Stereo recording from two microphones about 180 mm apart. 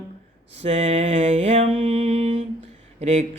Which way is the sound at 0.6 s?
35° right (ahead or behind).